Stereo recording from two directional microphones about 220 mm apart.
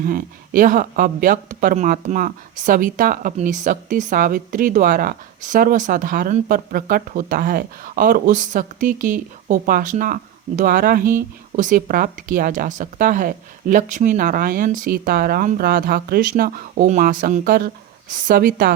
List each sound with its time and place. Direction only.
0.0 s speech: 40° right (ahead or behind)